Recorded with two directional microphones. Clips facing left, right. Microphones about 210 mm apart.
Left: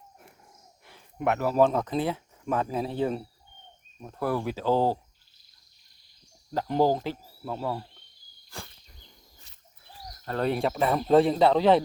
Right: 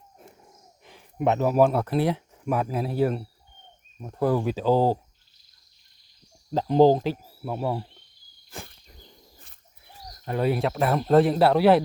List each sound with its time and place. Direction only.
0.9 s a sound: 20° right (ahead or behind)
1.5 s speech: 10° right (ahead or behind)
4.0 s speech: 15° right (ahead or behind)
6.5 s speech: 20° right (ahead or behind)
8.5 s insect: 20° right (ahead or behind)
9.0 s a sound: 50° right (ahead or behind)
10.2 s speech: 10° right (ahead or behind)